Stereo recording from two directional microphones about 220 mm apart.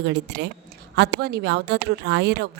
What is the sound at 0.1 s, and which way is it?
A woman's voice, 50° right (ahead or behind).